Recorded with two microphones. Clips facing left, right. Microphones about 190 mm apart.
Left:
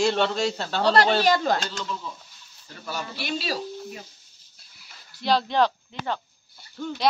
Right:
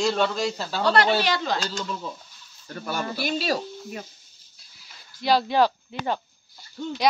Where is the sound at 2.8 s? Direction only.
55° right (ahead or behind).